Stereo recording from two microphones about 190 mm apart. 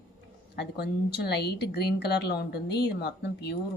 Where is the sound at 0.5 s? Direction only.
60° left (ahead or behind).